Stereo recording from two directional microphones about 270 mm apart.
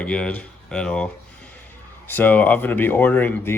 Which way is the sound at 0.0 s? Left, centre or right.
Centre.